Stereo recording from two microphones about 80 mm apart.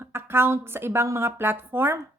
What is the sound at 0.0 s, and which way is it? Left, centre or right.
A woman's voice, right.